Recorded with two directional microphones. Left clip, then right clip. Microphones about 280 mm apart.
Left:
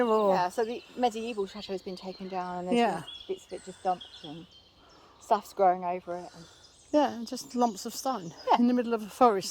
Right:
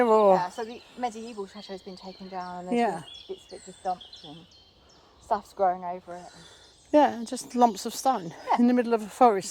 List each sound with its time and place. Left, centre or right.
0.0 s a sound: centre
0.3 s speech: left
2.7 s speech: centre
3.2 s speech: left
5.3 s speech: left
6.9 s speech: centre